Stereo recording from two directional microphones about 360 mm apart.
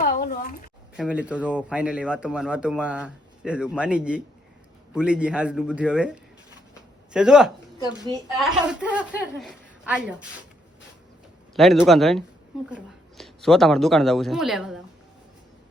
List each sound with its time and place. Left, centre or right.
0.0 s a sound: left
0.9 s speech: centre
11.5 s speech: centre